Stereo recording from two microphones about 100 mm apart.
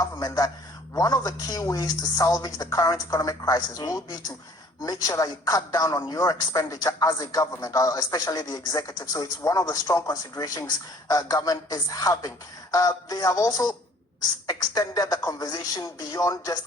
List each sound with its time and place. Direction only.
0.0 s a man's voice: 35° left (ahead or behind)